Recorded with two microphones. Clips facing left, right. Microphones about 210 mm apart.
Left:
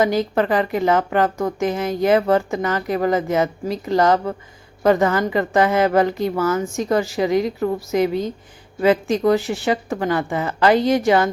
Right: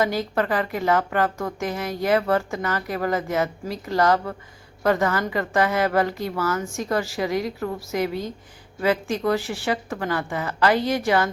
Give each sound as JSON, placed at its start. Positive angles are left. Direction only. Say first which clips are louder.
{"t": 0.0, "sound": "a woman's voice", "louder": "left 5 dB", "side_deg": 20}